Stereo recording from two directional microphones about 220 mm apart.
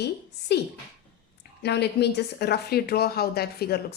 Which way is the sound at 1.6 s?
50° left (ahead or behind).